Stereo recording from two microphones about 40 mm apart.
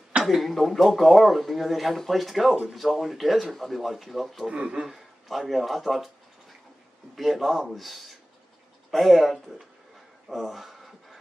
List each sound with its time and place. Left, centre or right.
0.2 s speech: centre
4.5 s speech: right
5.5 s speech: centre
7.2 s speech: centre
10.2 s a sound: centre